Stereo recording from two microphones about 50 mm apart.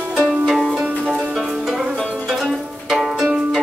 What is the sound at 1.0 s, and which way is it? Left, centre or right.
Music, right.